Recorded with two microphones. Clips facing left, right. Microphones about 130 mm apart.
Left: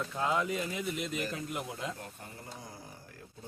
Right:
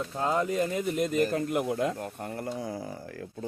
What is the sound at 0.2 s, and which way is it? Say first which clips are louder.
Speech: right 5 dB; 40° right (ahead or behind).